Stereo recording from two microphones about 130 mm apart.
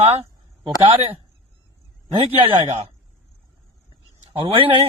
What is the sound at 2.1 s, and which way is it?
Speech, 45° right (ahead or behind).